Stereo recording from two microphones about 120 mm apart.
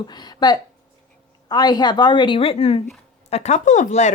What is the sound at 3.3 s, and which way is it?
Speech, 70° left (ahead or behind).